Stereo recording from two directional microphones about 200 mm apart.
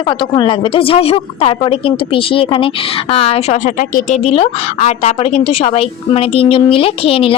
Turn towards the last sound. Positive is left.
turn(degrees=25)  # may be behind; listen again after turning